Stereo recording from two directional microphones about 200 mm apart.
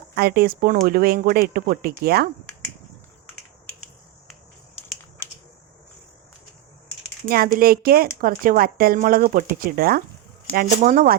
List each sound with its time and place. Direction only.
0.2 s speech: 50° right (ahead or behind)
7.3 s speech: 50° right (ahead or behind)